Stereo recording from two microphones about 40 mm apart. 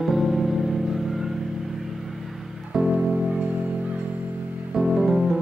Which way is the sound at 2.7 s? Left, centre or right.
Centre.